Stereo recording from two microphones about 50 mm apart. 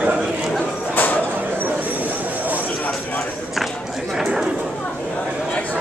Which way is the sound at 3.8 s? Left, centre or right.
Centre.